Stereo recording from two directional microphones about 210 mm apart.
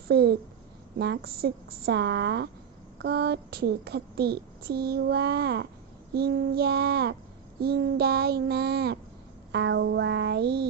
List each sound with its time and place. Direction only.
0.1 s speech: 50° right (ahead or behind)
9.5 s music: 55° right (ahead or behind)